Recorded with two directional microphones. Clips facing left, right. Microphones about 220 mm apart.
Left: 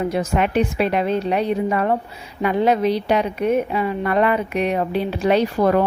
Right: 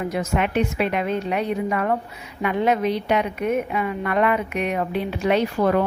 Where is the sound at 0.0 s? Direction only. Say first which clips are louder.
Left 3 dB; 30° left (ahead or behind).